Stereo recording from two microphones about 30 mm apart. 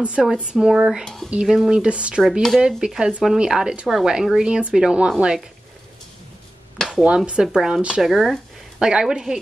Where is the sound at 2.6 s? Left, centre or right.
Right.